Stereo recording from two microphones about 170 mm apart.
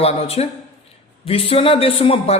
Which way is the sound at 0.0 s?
35° left (ahead or behind).